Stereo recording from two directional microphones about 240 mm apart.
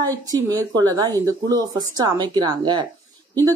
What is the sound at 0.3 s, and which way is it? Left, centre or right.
A woman's voice, centre.